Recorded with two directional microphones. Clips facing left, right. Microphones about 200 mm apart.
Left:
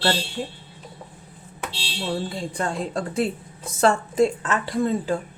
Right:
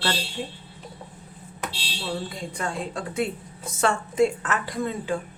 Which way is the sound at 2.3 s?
30° left (ahead or behind).